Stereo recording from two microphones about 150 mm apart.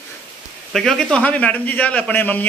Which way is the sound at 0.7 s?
5° left (ahead or behind).